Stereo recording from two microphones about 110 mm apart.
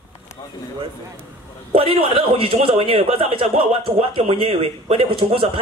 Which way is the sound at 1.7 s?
55° right (ahead or behind).